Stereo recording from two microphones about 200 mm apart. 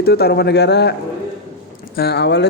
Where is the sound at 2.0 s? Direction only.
55° left (ahead or behind).